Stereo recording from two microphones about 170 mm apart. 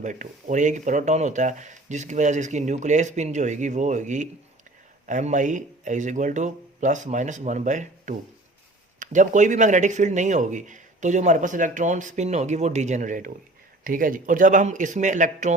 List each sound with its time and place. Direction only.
0.0 s speech: 50° right (ahead or behind)